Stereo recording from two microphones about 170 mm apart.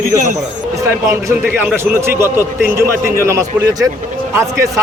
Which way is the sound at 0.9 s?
15° right (ahead or behind).